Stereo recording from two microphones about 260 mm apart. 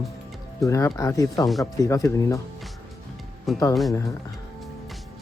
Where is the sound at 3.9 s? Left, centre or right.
Centre.